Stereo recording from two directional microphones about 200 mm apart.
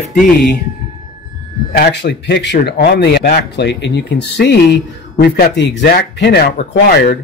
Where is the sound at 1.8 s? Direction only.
60° left (ahead or behind).